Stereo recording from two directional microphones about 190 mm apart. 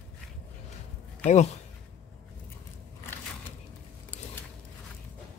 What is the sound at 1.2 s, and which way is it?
Speech, 35° left (ahead or behind).